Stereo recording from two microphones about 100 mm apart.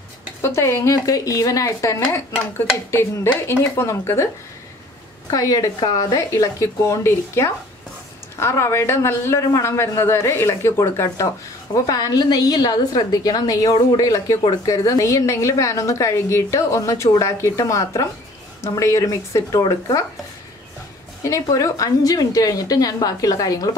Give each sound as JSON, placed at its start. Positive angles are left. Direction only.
{"t": 0.4, "sound": "a man's voice", "side_deg": 25}
{"t": 5.3, "sound": "a man's voice", "side_deg": 35}
{"t": 11.7, "sound": "speech", "side_deg": 40}
{"t": 21.2, "sound": "speech", "side_deg": 35}